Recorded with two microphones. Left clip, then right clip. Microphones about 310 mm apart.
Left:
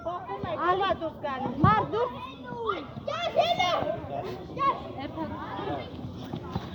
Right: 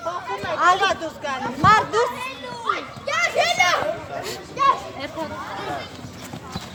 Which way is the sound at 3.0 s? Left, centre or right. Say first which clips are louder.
Right 6 dB; right.